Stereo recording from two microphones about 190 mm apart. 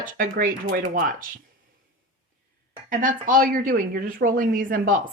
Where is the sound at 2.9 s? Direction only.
45° right (ahead or behind).